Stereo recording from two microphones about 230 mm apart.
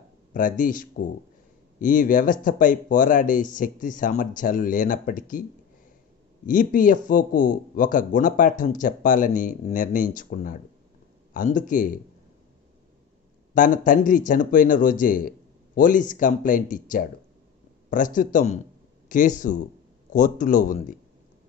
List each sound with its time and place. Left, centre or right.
0.3 s speech: left
13.6 s speech: left